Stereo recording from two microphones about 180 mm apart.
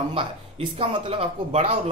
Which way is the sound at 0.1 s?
30° right (ahead or behind).